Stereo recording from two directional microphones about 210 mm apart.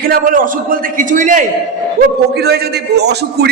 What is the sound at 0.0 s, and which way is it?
A man's voice, 45° right (ahead or behind).